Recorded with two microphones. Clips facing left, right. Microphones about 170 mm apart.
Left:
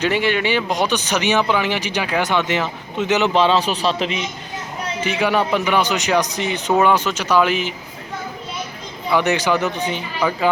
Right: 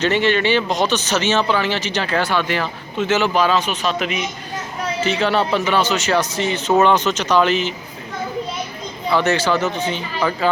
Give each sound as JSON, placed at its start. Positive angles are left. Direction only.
{"t": 0.0, "sound": "speech", "side_deg": 10}
{"t": 4.9, "sound": "speech", "side_deg": 15}
{"t": 9.1, "sound": "speech", "side_deg": 15}